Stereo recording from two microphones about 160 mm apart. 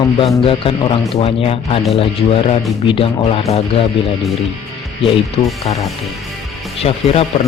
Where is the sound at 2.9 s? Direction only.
35° left (ahead or behind).